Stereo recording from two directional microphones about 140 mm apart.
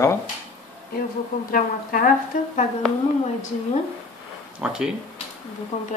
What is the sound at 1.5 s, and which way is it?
Speech, 75° left (ahead or behind).